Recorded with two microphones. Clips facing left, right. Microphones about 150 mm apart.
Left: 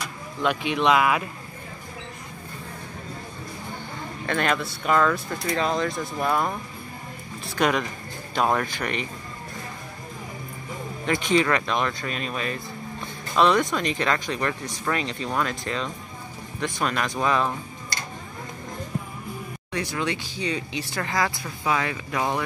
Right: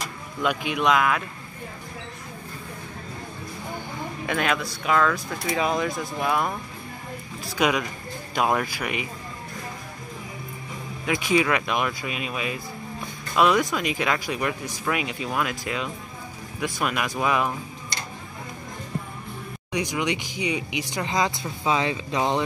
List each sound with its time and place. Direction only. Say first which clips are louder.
0.4 s speech: left 1 dB; centre (ahead or behind)
4.3 s speech: left 1 dB; 5° right (ahead or behind)
5.5 s speech: even; 10° right (ahead or behind)
11.1 s speech: even; 5° right (ahead or behind)
19.7 s speech: right 2 dB; 15° right (ahead or behind)